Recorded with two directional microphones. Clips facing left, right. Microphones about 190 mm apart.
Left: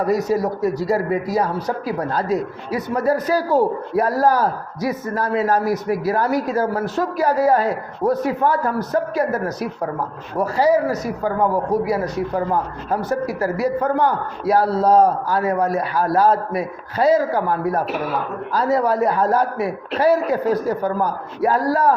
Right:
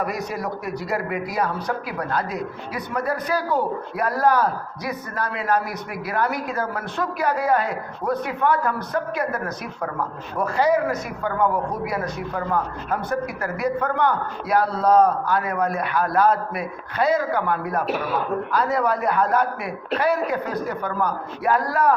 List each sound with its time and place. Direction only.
0.0 s a man's voice: 40° left (ahead or behind)
10.3 s a man's voice: 35° left (ahead or behind)